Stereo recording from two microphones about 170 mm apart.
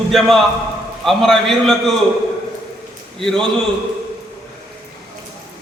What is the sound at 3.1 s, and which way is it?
Speech, centre (ahead or behind).